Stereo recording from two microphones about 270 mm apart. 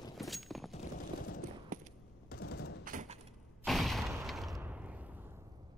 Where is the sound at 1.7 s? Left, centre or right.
Right.